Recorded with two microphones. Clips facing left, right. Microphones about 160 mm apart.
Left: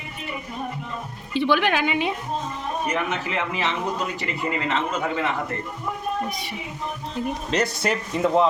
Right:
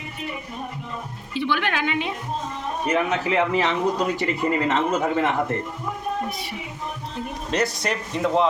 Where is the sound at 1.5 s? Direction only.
15° left (ahead or behind).